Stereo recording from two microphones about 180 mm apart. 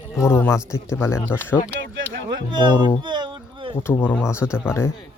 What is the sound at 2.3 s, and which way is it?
Speech, 25° right (ahead or behind).